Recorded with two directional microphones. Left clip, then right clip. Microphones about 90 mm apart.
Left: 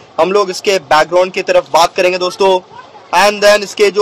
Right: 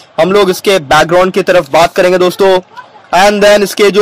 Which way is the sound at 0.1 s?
40° right (ahead or behind).